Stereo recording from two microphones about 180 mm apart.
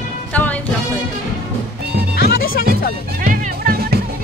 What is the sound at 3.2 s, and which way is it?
Music, 50° right (ahead or behind).